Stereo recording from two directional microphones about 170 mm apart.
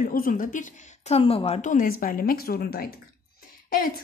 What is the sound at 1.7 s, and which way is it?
A woman's voice, 55° left (ahead or behind).